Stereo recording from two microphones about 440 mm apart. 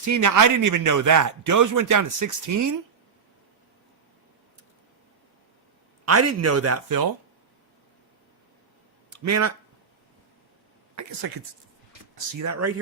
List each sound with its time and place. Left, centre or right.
0.0 s speech: right
6.1 s speech: right
9.0 s a sound: right
12.4 s speech: right